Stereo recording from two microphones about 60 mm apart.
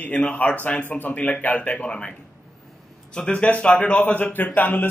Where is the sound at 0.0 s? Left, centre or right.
Left.